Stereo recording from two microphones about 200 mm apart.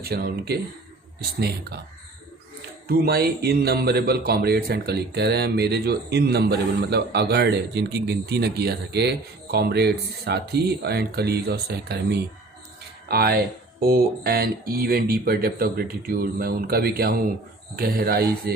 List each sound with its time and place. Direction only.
0.0 s speech: 50° right (ahead or behind)
2.8 s speech: 50° right (ahead or behind)